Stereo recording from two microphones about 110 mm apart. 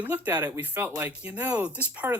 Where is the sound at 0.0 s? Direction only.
15° right (ahead or behind).